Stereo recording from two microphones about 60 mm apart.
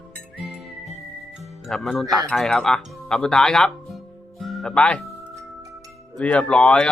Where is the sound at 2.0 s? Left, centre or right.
Centre.